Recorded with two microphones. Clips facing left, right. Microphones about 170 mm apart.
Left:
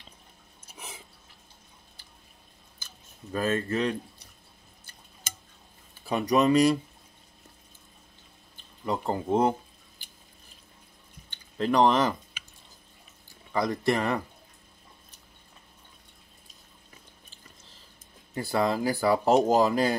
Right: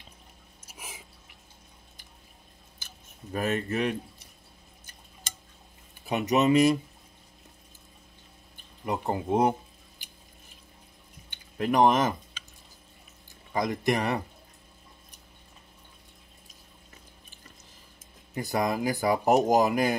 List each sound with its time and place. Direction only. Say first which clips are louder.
0.7 s drip: left 1 dB; 10° right (ahead or behind)
3.3 s speech: left 1 dB; 15° right (ahead or behind)
6.0 s speech: left 1 dB; 20° right (ahead or behind)
9.0 s speech: even; 15° right (ahead or behind)
11.2 s speech: left 1 dB; 15° right (ahead or behind)
13.5 s speech: left 1 dB; 15° right (ahead or behind)
18.3 s speech: left 1 dB; 15° right (ahead or behind)